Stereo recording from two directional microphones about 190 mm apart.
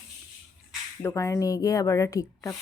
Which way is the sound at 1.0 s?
15° left (ahead or behind).